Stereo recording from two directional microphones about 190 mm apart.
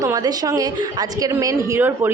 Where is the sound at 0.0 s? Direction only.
20° right (ahead or behind).